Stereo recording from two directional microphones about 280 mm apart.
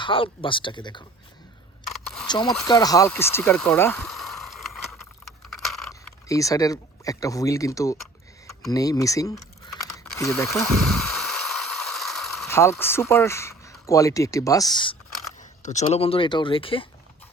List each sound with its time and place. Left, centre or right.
0.0 s speech: centre
2.2 s speech: centre
5.5 s a sound: centre
5.9 s speech: centre
10.2 s a sound: centre
15.4 s speech: left